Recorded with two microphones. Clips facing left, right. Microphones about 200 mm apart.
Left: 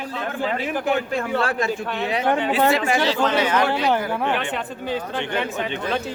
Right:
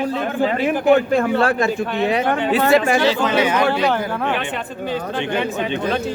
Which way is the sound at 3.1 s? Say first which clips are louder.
Right 3 dB; 10° right (ahead or behind).